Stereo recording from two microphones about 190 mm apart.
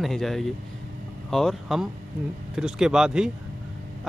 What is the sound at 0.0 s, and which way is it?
Speech, centre (ahead or behind).